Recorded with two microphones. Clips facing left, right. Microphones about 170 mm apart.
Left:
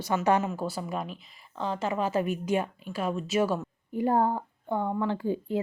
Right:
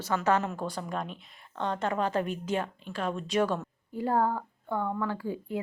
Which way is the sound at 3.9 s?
20° left (ahead or behind).